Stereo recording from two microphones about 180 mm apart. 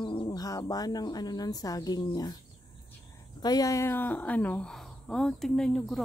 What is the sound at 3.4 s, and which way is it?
A woman's voice, 20° left (ahead or behind).